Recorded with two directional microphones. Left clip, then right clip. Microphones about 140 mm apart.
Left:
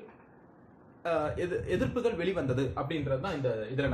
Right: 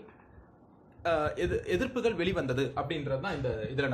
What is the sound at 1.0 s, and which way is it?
A man's voice, 35° right (ahead or behind).